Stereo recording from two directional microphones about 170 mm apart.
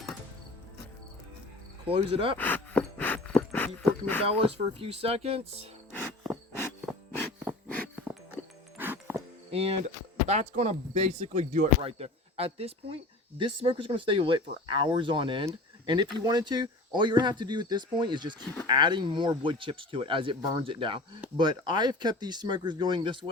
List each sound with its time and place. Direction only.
1.9 s speech: 35° right (ahead or behind)
2.4 s gasp: 10° left (ahead or behind)
4.2 s speech: 35° right (ahead or behind)
8.8 s music: 10° right (ahead or behind)
9.5 s speech: 35° right (ahead or behind)